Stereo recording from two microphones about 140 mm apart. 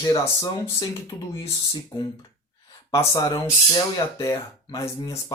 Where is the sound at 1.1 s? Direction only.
20° left (ahead or behind).